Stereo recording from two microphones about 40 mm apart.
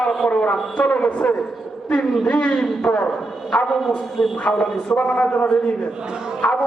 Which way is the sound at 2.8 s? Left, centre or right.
Left.